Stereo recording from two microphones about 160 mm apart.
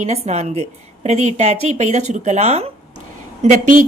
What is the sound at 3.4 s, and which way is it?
Speech, 55° right (ahead or behind).